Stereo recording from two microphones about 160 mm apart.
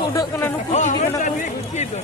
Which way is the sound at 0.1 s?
20° left (ahead or behind).